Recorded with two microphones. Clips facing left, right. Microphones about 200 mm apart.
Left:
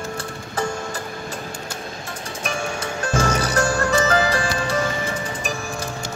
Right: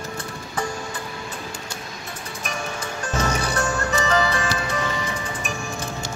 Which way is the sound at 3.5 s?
35° left (ahead or behind).